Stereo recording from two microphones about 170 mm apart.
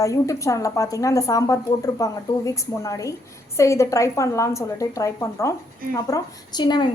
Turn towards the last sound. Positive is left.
turn(degrees=25)  # may be behind; listen again after turning